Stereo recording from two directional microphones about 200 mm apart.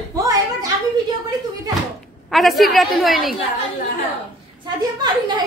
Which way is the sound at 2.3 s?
Centre (ahead or behind).